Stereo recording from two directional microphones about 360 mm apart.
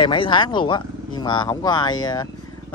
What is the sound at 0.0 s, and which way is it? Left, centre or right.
Speech, centre.